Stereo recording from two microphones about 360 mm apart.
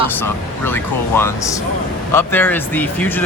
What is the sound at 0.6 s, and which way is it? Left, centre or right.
Speech, centre.